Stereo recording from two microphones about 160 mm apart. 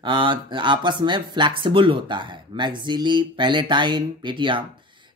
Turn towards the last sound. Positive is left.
turn(degrees=-30)  # may be behind; listen again after turning